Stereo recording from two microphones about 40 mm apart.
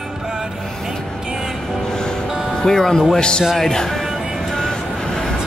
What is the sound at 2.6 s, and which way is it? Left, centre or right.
Speech, centre.